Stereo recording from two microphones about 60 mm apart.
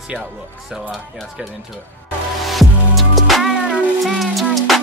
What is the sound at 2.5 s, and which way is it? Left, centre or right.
Music, centre.